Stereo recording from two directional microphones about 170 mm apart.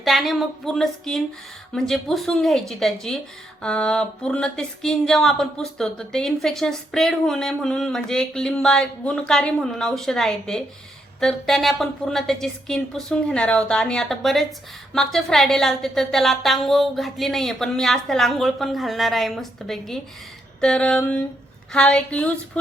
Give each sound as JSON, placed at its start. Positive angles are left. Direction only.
{"t": 0.0, "sound": "speech", "side_deg": 0}